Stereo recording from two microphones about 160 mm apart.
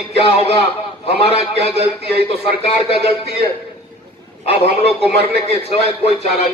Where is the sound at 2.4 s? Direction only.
35° left (ahead or behind).